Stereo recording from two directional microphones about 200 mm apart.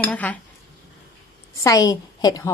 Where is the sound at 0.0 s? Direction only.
5° left (ahead or behind).